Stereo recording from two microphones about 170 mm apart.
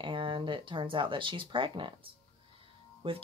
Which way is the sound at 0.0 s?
30° right (ahead or behind).